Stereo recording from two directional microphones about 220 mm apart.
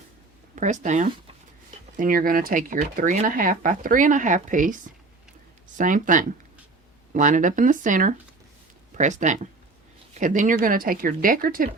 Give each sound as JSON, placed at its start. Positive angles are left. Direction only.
{"t": 0.5, "sound": "speech", "side_deg": -35}